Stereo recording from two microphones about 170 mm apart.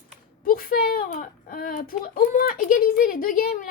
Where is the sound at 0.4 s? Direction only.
55° left (ahead or behind).